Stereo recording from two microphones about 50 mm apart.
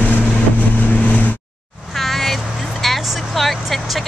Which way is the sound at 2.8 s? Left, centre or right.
Centre.